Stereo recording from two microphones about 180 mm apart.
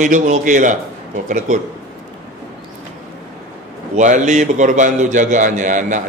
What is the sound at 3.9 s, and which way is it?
A man's voice, 40° right (ahead or behind).